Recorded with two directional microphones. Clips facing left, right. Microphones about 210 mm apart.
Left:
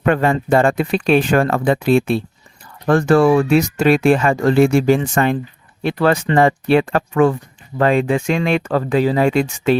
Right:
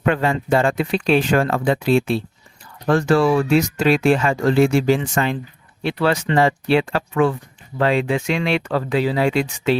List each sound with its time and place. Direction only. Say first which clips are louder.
0.0 s speech: left 3 dB; 50° left (ahead or behind)